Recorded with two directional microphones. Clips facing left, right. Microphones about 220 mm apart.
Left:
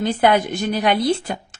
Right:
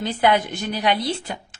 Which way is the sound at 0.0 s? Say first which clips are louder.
Left 3 dB; 50° left (ahead or behind).